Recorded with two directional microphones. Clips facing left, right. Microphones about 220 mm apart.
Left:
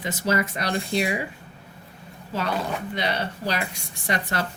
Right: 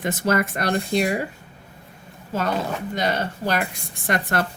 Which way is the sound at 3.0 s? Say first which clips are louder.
Right 5 dB; 45° right (ahead or behind).